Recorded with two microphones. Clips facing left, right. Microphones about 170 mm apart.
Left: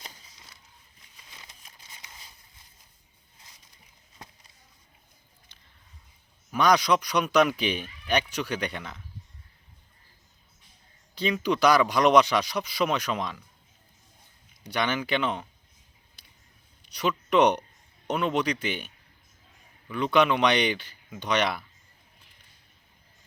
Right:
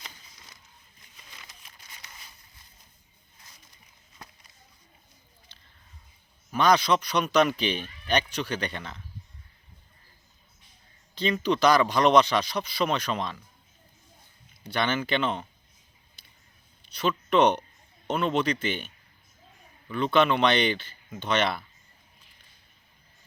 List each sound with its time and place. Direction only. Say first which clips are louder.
6.5 s speech: even; 10° left (ahead or behind)
11.1 s speech: right 1 dB; 10° left (ahead or behind)
14.6 s speech: right 1 dB; 15° left (ahead or behind)
16.9 s speech: even; 15° left (ahead or behind)
19.9 s speech: even; 10° left (ahead or behind)